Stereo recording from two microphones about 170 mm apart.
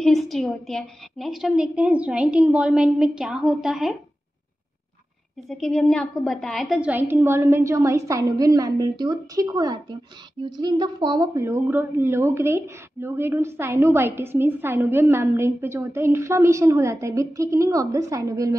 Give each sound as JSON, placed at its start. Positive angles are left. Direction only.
{"t": 0.0, "sound": "a woman's voice", "side_deg": 0}
{"t": 5.5, "sound": "a woman's voice", "side_deg": 5}